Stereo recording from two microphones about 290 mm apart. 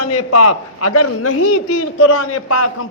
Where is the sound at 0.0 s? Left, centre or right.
Left.